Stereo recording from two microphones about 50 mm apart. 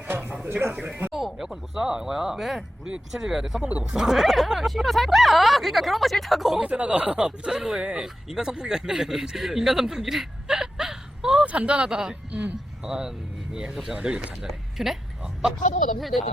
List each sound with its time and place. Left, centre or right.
0.1 s a sound: right
0.9 s speech: right
1.1 s speech: centre
6.6 s speech: right
11.4 s speech: right
14.4 s speech: centre
15.2 s a sound: centre
16.0 s speech: centre